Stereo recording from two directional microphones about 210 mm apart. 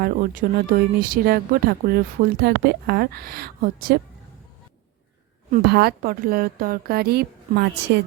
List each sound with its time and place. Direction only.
0.0 s speech: 40° right (ahead or behind)
5.5 s speech: 45° right (ahead or behind)